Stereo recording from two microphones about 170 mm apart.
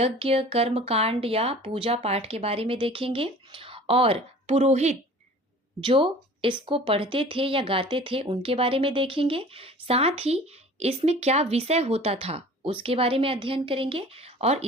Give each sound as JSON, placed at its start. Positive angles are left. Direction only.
{"t": 0.0, "sound": "a woman's voice", "side_deg": -35}